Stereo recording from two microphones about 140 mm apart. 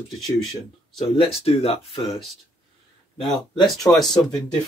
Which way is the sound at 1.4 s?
45° left (ahead or behind).